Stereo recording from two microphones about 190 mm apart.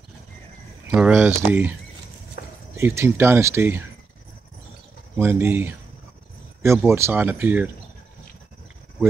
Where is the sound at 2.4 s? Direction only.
60° left (ahead or behind).